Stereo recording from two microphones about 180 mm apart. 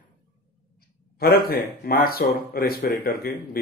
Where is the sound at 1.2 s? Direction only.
55° left (ahead or behind).